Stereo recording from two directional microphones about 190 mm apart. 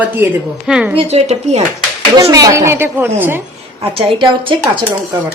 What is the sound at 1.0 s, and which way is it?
Speech, 35° right (ahead or behind).